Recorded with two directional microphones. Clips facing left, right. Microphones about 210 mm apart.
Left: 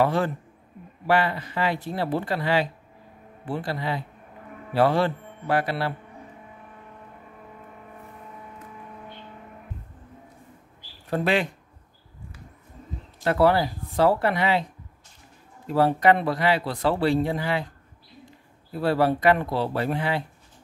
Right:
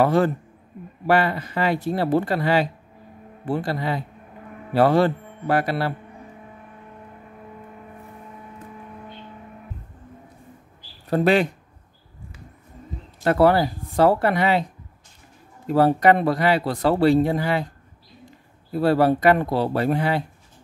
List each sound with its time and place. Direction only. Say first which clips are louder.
0.0 s speech: right 4 dB; 45° right (ahead or behind)
11.1 s speech: right 5 dB; 40° right (ahead or behind)
13.2 s speech: right 3 dB; 45° right (ahead or behind)
15.7 s speech: right 3 dB; 45° right (ahead or behind)
18.7 s speech: right 4 dB; 40° right (ahead or behind)